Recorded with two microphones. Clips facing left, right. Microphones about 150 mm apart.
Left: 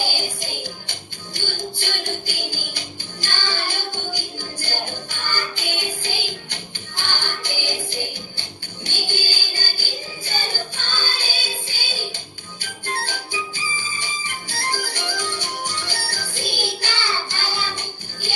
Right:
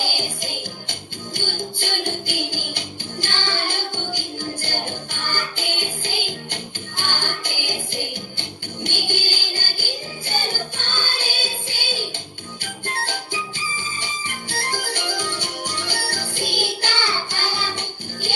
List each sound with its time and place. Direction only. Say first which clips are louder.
1.4 s music: right 1 dB; 55° right (ahead or behind)